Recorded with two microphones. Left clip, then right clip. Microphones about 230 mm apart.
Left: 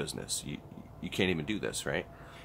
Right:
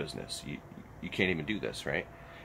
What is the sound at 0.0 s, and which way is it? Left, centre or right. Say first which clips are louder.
Speech: left 1 dB; centre.